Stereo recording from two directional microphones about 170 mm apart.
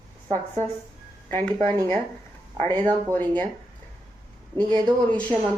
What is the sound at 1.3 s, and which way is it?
Speech, 15° left (ahead or behind).